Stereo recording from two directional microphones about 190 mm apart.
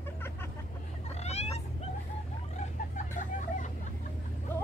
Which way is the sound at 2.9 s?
40° left (ahead or behind).